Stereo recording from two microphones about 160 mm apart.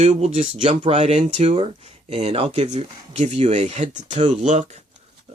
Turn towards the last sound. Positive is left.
turn(degrees=-45)  # may be behind; listen again after turning